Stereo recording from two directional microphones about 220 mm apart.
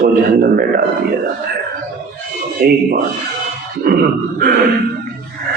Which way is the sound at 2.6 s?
45° right (ahead or behind).